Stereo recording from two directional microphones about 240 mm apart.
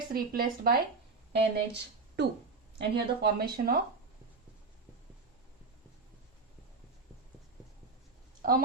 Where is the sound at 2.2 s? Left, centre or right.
Right.